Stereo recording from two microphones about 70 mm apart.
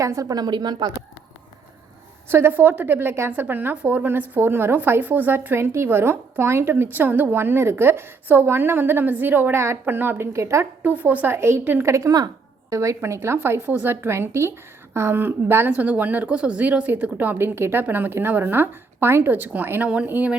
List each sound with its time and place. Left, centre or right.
0.0 s a woman's voice: right
2.3 s a woman's voice: right
5.5 s a woman's voice: right
10.3 s a woman's voice: right
10.8 s a woman's voice: right
11.3 s a woman's voice: right
11.9 s a woman's voice: right